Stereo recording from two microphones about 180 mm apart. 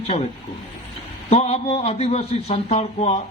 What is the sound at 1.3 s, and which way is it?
A man's voice, 35° left (ahead or behind).